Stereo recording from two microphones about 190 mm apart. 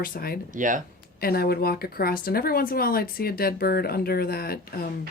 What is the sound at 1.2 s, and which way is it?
A woman's voice, 55° left (ahead or behind).